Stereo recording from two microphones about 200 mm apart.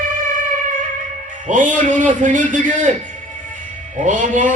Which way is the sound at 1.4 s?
40° right (ahead or behind).